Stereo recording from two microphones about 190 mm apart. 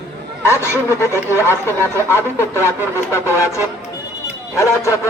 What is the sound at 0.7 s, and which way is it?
Speech, 15° left (ahead or behind).